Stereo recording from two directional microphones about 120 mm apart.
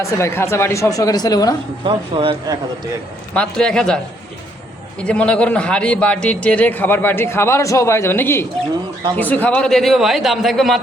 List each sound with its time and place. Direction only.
0.0 s speech: 20° left (ahead or behind)
1.8 s speech: 45° right (ahead or behind)
3.3 s a man's voice: 5° left (ahead or behind)